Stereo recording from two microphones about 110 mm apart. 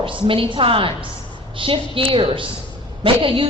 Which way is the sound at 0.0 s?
50° right (ahead or behind).